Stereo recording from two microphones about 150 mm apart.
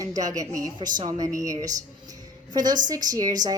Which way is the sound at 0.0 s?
25° right (ahead or behind).